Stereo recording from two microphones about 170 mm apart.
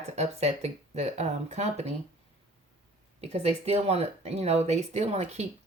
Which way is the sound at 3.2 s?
40° right (ahead or behind).